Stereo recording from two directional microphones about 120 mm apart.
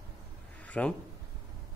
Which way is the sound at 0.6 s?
10° left (ahead or behind).